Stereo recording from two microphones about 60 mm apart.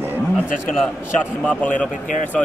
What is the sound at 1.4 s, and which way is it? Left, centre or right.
Speech, left.